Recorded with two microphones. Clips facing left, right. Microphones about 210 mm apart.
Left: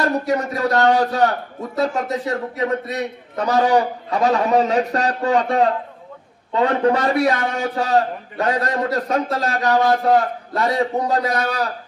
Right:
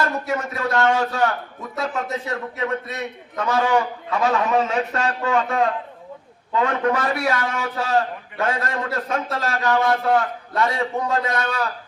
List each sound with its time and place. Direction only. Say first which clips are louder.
0.0 s a man's voice: left 4 dB; 35° left (ahead or behind)